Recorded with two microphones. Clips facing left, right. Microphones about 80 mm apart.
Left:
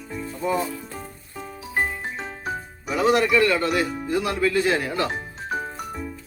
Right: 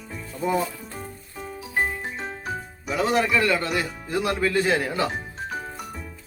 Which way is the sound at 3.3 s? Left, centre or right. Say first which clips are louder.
Left 3 dB; centre.